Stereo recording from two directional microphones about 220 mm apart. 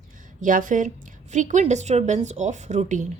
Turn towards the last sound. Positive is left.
turn(degrees=-35)  # may be behind; listen again after turning